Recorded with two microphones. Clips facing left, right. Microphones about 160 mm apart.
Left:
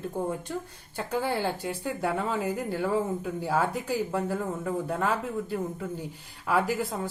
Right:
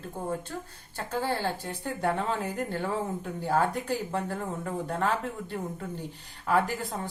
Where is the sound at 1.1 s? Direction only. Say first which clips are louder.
Left 1 dB; 15° left (ahead or behind).